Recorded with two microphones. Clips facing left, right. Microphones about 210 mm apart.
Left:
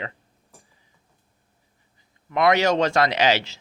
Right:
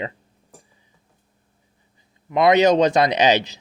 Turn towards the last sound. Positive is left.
turn(degrees=-20)  # may be behind; listen again after turning